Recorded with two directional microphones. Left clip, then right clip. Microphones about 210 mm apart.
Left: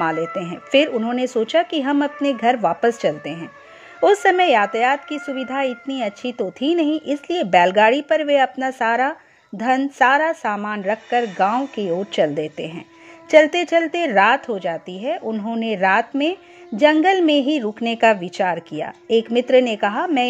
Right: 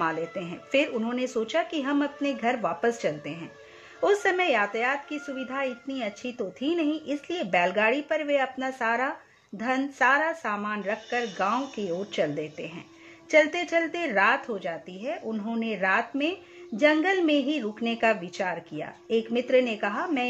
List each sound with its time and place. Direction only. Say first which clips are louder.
0.0 s a woman's voice: left 7 dB; 30° left (ahead or behind)
15.3 s speech: left 8 dB; 20° left (ahead or behind)